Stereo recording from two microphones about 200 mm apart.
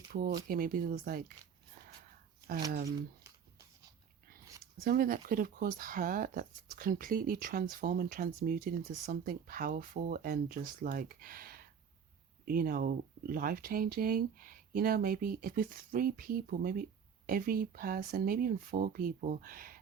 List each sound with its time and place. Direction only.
0.4 s speech: 45° right (ahead or behind)
4.8 s speech: 45° right (ahead or behind)